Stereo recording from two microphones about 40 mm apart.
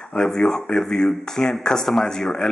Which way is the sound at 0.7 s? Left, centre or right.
Centre.